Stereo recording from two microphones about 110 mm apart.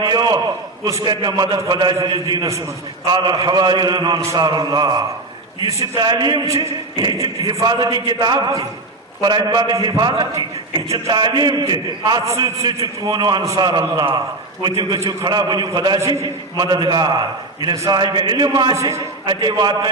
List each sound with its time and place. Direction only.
0.0 s a sound: 40° right (ahead or behind)
1.0 s a man's voice: 40° right (ahead or behind)
11.1 s a man's voice: 40° right (ahead or behind)